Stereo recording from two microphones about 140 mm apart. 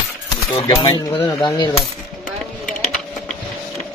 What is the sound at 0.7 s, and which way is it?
Speech, 30° left (ahead or behind).